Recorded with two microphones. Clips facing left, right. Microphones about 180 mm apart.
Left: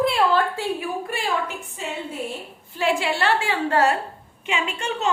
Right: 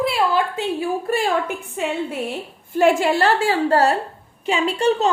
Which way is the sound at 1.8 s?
65° right (ahead or behind).